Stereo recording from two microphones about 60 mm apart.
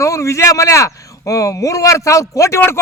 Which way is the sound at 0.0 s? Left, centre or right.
Left.